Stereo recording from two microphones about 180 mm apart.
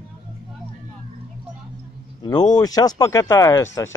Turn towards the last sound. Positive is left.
turn(degrees=15)  # may be behind; listen again after turning